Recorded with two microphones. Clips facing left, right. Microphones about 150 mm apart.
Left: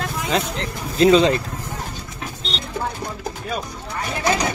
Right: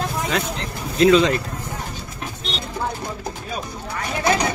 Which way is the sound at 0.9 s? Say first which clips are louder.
Left 1 dB; 30° left (ahead or behind).